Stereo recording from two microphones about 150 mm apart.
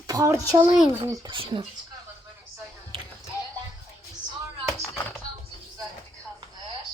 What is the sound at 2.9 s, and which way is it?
Music, 40° right (ahead or behind).